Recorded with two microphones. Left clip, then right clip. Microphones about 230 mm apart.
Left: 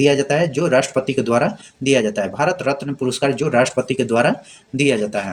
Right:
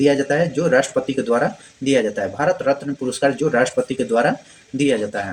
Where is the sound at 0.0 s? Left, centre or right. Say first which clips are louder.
Left 1 dB; left.